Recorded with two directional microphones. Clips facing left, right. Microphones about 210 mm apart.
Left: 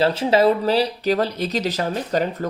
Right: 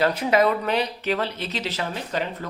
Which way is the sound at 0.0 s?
30° left (ahead or behind).